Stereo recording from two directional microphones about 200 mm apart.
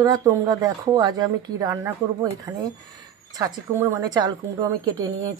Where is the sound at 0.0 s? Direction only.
15° right (ahead or behind).